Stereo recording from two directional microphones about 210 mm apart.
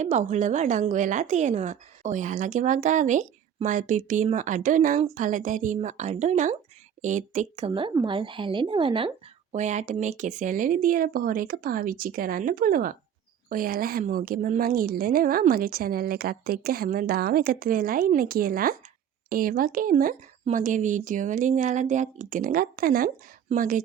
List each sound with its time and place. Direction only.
0.0 s a woman's voice: 35° right (ahead or behind)